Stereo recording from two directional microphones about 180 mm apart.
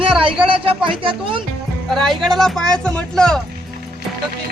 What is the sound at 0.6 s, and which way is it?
Speech, 30° right (ahead or behind).